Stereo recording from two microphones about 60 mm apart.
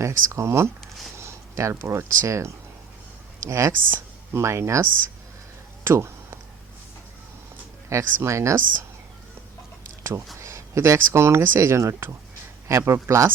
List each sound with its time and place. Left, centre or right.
0.0 s speech: right
0.8 s a sound: centre
1.1 s speech: right
3.7 s speech: right
7.9 s speech: right
10.0 s speech: right